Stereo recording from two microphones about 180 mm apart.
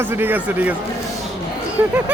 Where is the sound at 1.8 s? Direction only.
10° right (ahead or behind).